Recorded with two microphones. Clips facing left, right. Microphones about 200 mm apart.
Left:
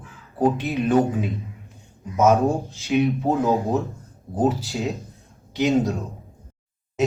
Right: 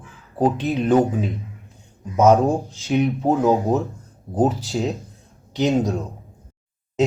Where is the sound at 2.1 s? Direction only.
15° right (ahead or behind).